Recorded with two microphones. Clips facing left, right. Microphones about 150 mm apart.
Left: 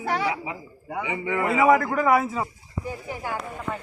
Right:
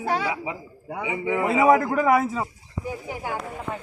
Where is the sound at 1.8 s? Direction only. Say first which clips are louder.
Right 1 dB; 30° right (ahead or behind).